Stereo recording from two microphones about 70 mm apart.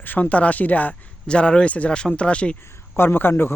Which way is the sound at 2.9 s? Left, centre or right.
Left.